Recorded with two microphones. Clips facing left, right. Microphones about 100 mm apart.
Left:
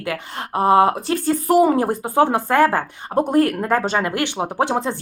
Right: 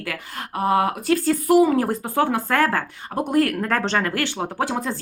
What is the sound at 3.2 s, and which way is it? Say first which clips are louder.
A woman's voice: left 3 dB; 30° left (ahead or behind).